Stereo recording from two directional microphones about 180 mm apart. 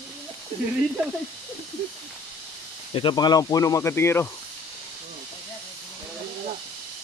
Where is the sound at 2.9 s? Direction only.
25° left (ahead or behind).